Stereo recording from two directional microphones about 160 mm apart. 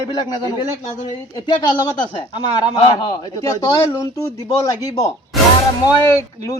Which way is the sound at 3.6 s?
25° left (ahead or behind).